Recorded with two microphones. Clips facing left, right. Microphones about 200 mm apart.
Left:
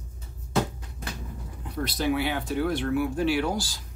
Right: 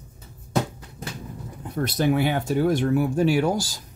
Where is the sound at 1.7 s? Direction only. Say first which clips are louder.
Right 4 dB; 50° right (ahead or behind).